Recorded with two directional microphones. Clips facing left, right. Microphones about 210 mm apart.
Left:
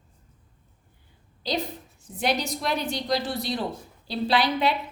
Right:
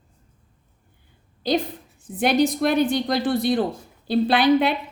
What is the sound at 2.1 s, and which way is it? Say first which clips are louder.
A woman's voice: right 8 dB; 55° right (ahead or behind).